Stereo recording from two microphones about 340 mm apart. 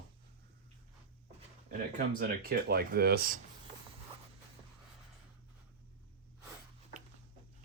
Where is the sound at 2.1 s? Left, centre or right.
Right.